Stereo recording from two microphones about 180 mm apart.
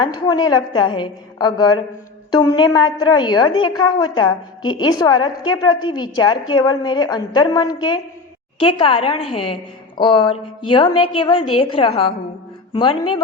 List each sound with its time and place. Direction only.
0.1 s a woman's voice: 20° left (ahead or behind)